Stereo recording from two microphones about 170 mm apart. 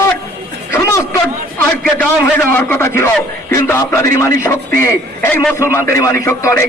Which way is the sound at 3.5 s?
15° left (ahead or behind).